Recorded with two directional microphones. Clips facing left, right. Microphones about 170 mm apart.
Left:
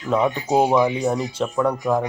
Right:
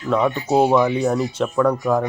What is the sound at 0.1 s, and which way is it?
Speech, 10° left (ahead or behind).